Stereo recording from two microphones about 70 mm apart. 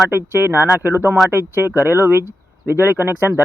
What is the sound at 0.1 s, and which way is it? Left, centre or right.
Speech, right.